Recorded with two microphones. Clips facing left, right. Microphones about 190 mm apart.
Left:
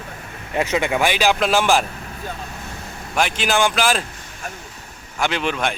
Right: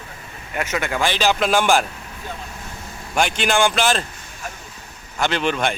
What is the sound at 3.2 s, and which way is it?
Speech, centre (ahead or behind).